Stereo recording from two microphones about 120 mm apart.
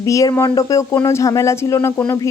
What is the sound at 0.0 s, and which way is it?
A woman's voice, 25° left (ahead or behind).